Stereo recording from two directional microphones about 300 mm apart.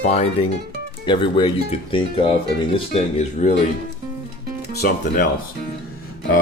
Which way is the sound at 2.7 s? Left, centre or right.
Left.